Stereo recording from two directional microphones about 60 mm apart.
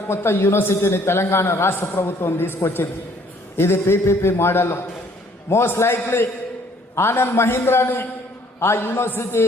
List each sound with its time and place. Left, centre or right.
0.1 s a man's voice: left
3.6 s a man's voice: left